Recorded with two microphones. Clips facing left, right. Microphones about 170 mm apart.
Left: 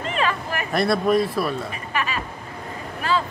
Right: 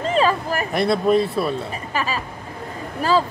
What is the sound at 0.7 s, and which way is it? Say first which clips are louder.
Speech: right 1 dB; 25° right (ahead or behind).